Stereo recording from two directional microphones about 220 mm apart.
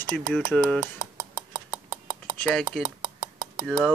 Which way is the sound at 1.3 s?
20° right (ahead or behind).